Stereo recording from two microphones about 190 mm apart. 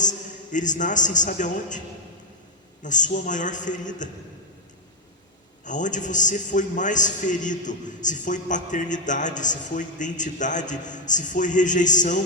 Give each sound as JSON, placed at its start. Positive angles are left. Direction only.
{"t": 0.0, "sound": "a man's voice", "side_deg": 40}
{"t": 2.8, "sound": "a man's voice", "side_deg": 40}
{"t": 5.6, "sound": "a man's voice", "side_deg": 40}